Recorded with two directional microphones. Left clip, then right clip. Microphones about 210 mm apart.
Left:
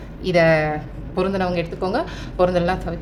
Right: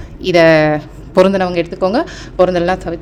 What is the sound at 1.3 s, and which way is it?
A woman's voice, 40° right (ahead or behind).